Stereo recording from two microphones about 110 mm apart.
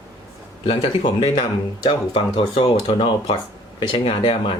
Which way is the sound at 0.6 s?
65° left (ahead or behind).